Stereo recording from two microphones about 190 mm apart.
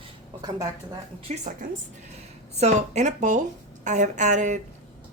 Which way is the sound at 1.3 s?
30° right (ahead or behind).